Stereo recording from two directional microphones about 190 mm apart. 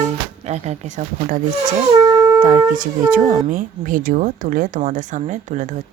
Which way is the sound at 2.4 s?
45° right (ahead or behind).